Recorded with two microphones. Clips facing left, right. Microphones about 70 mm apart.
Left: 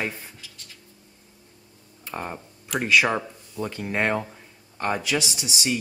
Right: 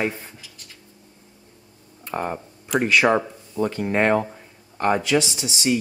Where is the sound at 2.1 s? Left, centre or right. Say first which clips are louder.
Right 6 dB; right.